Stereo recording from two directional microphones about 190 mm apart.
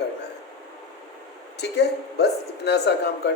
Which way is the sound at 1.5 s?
60° left (ahead or behind).